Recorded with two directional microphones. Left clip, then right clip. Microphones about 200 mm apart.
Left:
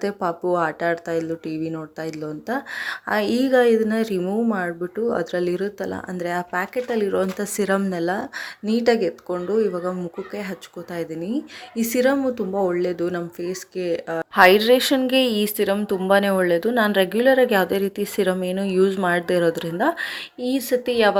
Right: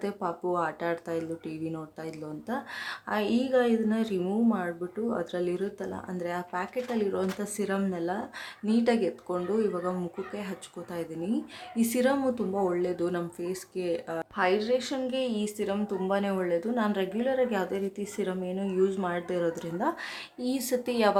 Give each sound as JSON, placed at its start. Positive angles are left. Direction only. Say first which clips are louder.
{"t": 0.0, "sound": "speech", "louder": "left 8 dB", "side_deg": 25}
{"t": 10.9, "sound": "speech", "louder": "left 6 dB", "side_deg": 25}
{"t": 14.3, "sound": "speech", "louder": "left 13 dB", "side_deg": 45}